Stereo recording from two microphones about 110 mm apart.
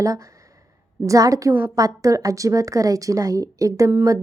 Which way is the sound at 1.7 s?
30° right (ahead or behind).